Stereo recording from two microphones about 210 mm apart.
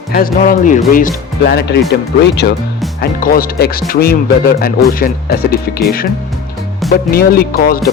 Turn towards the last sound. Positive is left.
turn(degrees=45)  # may be behind; listen again after turning